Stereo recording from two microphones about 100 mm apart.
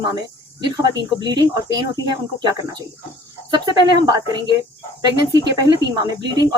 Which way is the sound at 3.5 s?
50° right (ahead or behind).